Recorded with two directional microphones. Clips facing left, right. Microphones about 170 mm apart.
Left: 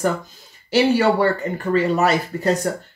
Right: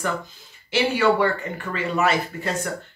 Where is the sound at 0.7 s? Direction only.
35° left (ahead or behind).